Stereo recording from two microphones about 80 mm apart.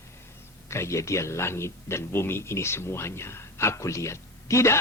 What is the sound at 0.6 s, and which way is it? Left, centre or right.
Speech, left.